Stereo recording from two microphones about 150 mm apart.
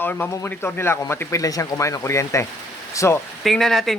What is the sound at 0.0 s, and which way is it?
Speech, 10° left (ahead or behind).